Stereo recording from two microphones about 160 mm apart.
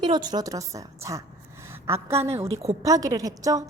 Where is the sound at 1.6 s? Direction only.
15° right (ahead or behind).